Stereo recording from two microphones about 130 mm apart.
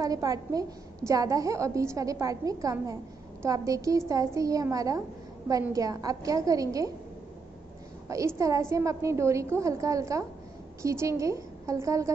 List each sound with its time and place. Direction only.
0.0 s a woman's voice: 25° right (ahead or behind)
8.1 s a woman's voice: 25° right (ahead or behind)